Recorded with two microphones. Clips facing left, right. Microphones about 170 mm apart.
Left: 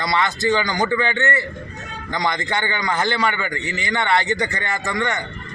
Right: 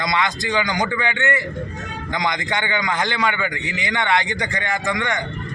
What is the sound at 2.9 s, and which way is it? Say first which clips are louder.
A man's voice: left 1 dB; 15° right (ahead or behind).